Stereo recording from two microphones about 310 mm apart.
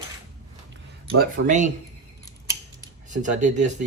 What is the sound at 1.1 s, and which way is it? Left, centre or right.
Speech, right.